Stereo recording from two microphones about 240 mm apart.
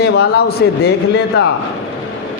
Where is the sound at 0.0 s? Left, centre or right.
Left.